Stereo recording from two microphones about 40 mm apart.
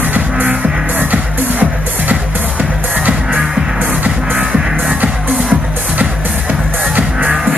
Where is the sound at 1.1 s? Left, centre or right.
Right.